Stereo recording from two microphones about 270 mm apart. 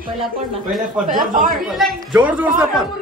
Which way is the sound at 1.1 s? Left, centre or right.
Right.